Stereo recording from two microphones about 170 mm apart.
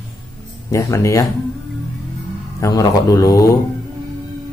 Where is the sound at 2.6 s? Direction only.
20° left (ahead or behind).